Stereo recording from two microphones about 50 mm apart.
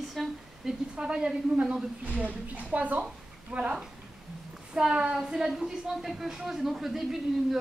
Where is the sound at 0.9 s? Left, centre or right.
Centre; by 3.7 s right.